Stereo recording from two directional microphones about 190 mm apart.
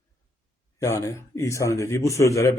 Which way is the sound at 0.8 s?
15° left (ahead or behind).